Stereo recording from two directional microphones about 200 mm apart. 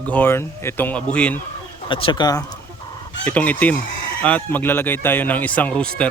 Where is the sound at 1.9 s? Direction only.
25° left (ahead or behind).